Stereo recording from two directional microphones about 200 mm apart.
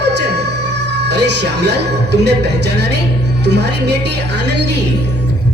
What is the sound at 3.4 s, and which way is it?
Music, 55° right (ahead or behind).